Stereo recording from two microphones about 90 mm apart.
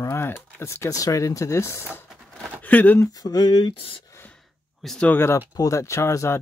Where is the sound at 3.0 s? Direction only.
45° left (ahead or behind).